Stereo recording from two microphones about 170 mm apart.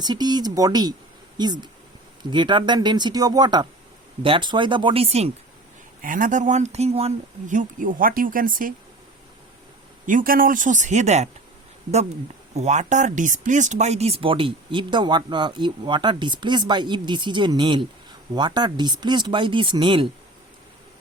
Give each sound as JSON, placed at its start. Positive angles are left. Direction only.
{"t": 0.0, "sound": "speech", "side_deg": -25}
{"t": 6.0, "sound": "speech", "side_deg": -50}
{"t": 10.1, "sound": "speech", "side_deg": -55}
{"t": 12.5, "sound": "speech", "side_deg": -45}